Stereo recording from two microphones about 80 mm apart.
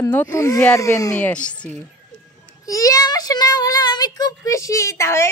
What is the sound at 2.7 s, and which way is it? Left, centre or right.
Speech, left.